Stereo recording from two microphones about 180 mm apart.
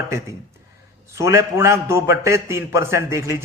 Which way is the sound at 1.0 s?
15° right (ahead or behind).